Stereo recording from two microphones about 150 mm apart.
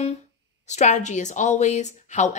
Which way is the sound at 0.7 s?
50° left (ahead or behind).